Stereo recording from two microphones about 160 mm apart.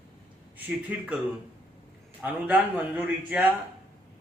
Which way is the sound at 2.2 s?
10° right (ahead or behind).